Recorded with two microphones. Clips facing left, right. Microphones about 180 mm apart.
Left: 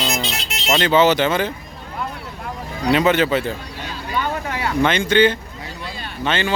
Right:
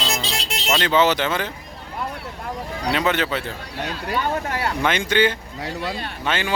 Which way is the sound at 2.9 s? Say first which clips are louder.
Left 6 dB; 5° left (ahead or behind).